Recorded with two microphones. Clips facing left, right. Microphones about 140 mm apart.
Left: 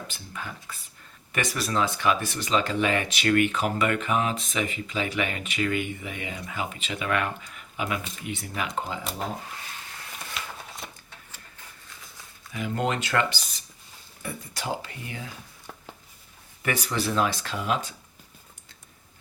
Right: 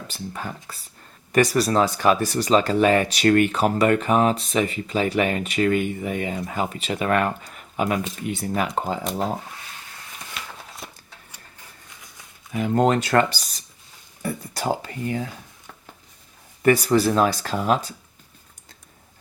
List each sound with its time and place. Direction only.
0.1 s speech: 40° right (ahead or behind)
10.8 s a sound: centre (ahead or behind)
12.5 s speech: 45° right (ahead or behind)
16.6 s speech: 40° right (ahead or behind)